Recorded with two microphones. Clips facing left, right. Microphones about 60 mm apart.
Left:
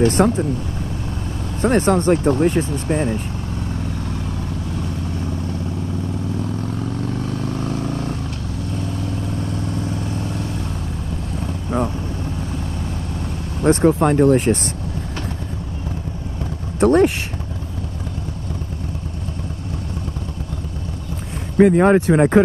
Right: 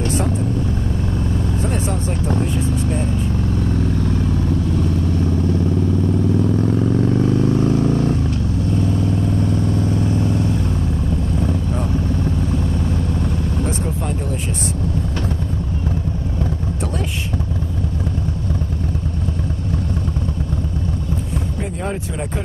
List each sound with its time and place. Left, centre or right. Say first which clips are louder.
0.2 s speech: left 7 dB; left
1.6 s speech: left 6 dB; left
6.4 s vehicle: right 7 dB; centre
9.4 s vehicle: right 5 dB; centre
13.7 s speech: left 9 dB; left
16.8 s vehicle: left 15 dB; left
21.5 s speech: left 18 dB; left